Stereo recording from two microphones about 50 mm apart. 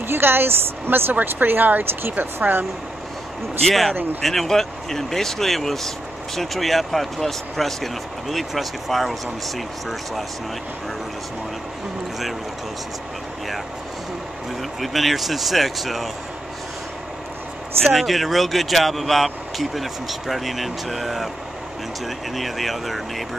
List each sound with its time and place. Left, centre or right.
0.0 s speech: right
3.6 s speech: centre
14.6 s speech: centre
17.8 s speech: centre